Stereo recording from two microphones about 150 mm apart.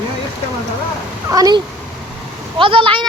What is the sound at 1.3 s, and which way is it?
Female singing, 25° right (ahead or behind).